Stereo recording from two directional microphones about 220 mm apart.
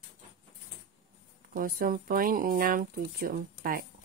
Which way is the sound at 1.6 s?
40° right (ahead or behind).